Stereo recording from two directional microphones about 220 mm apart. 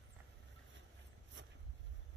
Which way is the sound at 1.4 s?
55° right (ahead or behind).